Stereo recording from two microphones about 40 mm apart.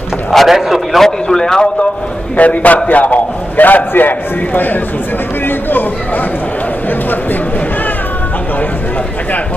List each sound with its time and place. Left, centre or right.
0.3 s a sound: centre
0.6 s a man's voice: centre
1.0 s a man's voice: centre
2.3 s a man's voice: left